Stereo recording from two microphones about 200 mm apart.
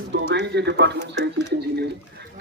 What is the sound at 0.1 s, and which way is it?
Speech, 60° right (ahead or behind).